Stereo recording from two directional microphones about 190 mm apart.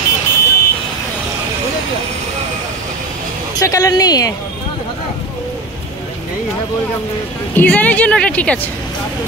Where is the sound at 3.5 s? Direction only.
15° left (ahead or behind).